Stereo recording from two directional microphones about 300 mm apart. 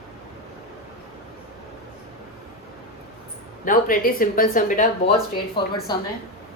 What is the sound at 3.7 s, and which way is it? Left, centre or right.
A woman's voice, left.